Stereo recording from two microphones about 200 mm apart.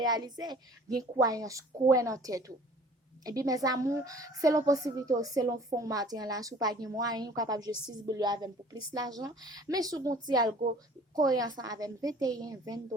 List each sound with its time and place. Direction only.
0.0 s a woman's voice: 20° right (ahead or behind)